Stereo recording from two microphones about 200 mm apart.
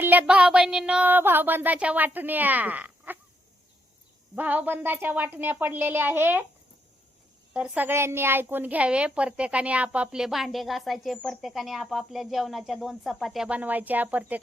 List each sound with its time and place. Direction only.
0.0 s speech: 10° right (ahead or behind)
4.4 s speech: 10° right (ahead or behind)
7.5 s a child's voice: 5° right (ahead or behind)